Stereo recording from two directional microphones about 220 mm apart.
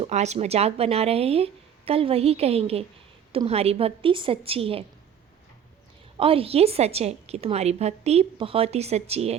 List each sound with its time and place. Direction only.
0.0 s a woman's voice: 30° right (ahead or behind)
6.1 s a woman's voice: 25° right (ahead or behind)